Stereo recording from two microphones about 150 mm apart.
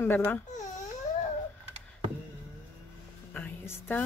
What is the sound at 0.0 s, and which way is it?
Speech, 15° left (ahead or behind).